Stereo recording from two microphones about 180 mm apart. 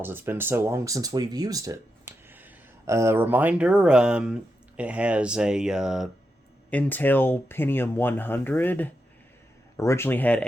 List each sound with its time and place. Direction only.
0.0 s speech: 10° right (ahead or behind)
6.7 s speech: 10° left (ahead or behind)